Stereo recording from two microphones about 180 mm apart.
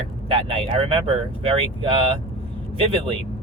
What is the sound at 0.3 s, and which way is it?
Speech, 30° right (ahead or behind).